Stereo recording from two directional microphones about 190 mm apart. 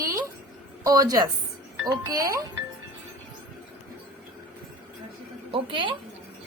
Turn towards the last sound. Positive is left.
turn(degrees=-25)  # may be behind; listen again after turning